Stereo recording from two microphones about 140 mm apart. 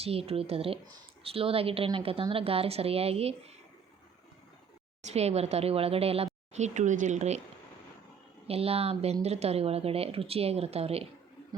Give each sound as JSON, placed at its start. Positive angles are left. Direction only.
{"t": 0.0, "sound": "a woman's voice", "side_deg": -45}
{"t": 5.1, "sound": "speech", "side_deg": -50}
{"t": 6.5, "sound": "speech", "side_deg": -60}
{"t": 8.4, "sound": "speech", "side_deg": -45}